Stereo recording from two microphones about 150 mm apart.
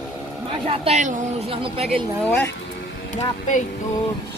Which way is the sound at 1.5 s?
40° right (ahead or behind).